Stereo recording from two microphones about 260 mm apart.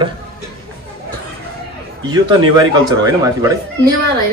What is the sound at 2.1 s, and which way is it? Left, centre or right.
Speech, centre.